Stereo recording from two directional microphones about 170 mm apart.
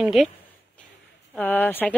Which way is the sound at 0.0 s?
Centre (ahead or behind).